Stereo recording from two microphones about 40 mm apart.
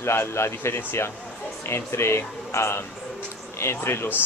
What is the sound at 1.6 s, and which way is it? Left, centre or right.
Speech, left.